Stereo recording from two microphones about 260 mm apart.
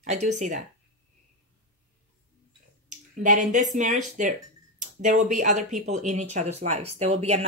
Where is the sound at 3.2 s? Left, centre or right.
Right.